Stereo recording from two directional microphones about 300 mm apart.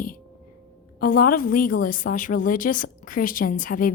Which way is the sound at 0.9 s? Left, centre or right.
Left.